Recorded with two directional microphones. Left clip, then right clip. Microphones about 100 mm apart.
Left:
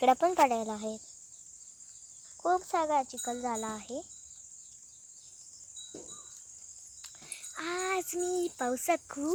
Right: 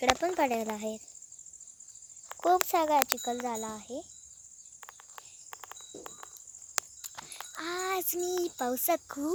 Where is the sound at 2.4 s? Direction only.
70° right (ahead or behind).